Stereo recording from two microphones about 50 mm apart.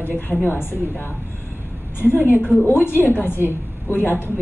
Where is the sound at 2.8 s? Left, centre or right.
Left.